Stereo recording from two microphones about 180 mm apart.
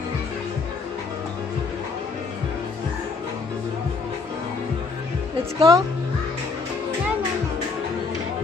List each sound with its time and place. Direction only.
5.6 s a woman's voice: 20° right (ahead or behind)